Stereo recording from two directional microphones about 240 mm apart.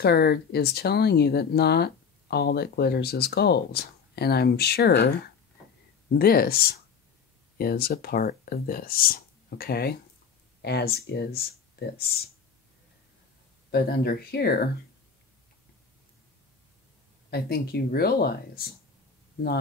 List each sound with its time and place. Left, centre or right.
0.0 s speech: left
13.7 s speech: left
17.3 s speech: left